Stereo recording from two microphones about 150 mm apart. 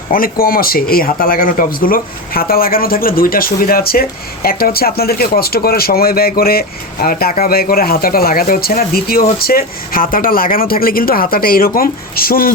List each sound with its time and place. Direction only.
0.1 s speech: 75° left (ahead or behind)